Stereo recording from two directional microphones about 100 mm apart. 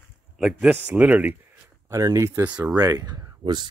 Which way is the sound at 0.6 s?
15° right (ahead or behind).